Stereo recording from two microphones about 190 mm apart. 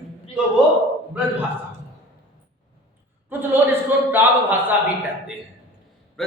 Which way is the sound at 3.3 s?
10° right (ahead or behind).